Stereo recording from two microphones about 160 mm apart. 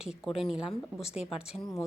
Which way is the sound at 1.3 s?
25° left (ahead or behind).